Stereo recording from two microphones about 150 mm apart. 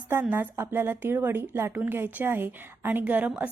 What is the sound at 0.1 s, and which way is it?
A woman's voice, 15° right (ahead or behind).